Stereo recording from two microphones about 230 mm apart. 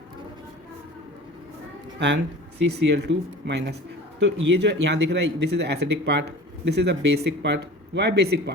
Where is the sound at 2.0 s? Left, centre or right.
Right.